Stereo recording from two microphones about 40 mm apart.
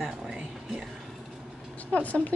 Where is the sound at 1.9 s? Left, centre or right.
Left.